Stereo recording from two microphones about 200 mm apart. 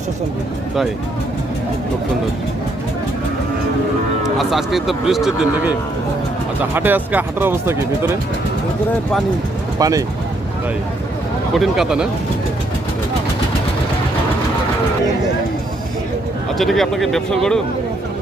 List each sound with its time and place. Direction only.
4.4 s speech: centre (ahead or behind)
9.7 s speech: 20° right (ahead or behind)
11.5 s speech: centre (ahead or behind)
16.6 s speech: centre (ahead or behind)